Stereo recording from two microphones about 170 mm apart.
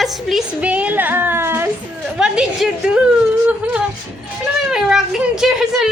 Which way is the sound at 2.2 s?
5° right (ahead or behind).